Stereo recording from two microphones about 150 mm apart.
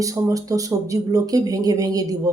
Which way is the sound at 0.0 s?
25° right (ahead or behind).